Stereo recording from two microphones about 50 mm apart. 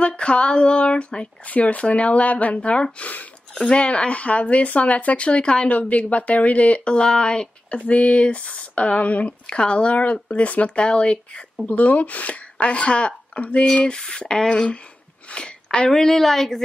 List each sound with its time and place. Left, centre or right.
0.0 s speech: left
13.9 s speech: centre
15.2 s a sound: centre
15.9 s speech: centre